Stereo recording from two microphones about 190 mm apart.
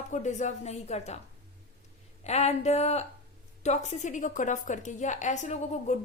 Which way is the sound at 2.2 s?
35° left (ahead or behind).